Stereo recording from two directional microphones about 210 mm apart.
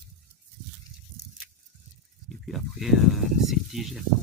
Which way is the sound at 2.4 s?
Centre (ahead or behind).